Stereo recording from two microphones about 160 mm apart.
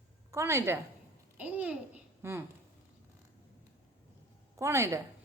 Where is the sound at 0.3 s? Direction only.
15° right (ahead or behind).